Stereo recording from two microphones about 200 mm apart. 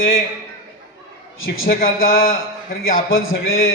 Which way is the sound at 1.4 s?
85° left.